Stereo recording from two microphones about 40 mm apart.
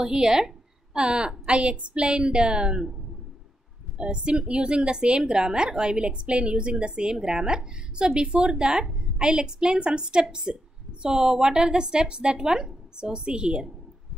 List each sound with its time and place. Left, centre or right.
0.0 s a woman's voice: centre
4.0 s a woman's voice: right